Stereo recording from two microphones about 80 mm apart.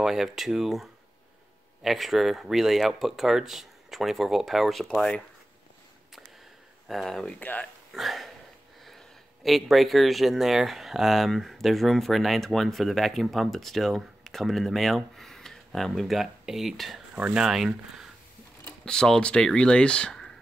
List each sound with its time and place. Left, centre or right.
0.0 s speech: centre
6.9 s speech: centre
7.3 s speech: left
7.9 s a sound: centre
8.8 s speech: centre
17.1 s speech: centre
18.9 s speech: centre